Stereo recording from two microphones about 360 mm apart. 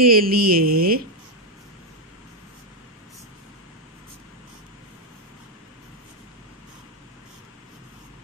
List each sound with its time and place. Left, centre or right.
0.0 s speech: right